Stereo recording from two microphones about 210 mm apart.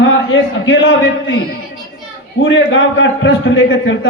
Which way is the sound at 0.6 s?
60° left (ahead or behind).